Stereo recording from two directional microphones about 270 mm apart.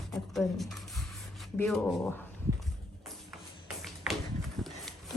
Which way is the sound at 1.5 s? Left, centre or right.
Centre.